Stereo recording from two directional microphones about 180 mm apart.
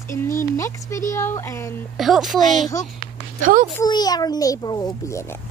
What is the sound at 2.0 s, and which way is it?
Speech, centre (ahead or behind).